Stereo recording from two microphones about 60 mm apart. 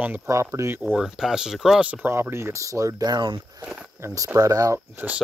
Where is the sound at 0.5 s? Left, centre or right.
Right.